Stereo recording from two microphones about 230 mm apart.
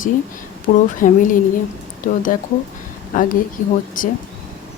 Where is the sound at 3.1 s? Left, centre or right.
Left.